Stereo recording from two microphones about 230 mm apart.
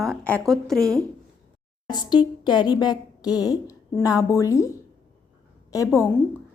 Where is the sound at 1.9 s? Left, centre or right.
Centre.